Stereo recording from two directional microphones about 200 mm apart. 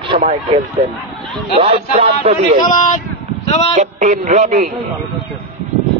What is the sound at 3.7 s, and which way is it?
Speech, 35° right (ahead or behind).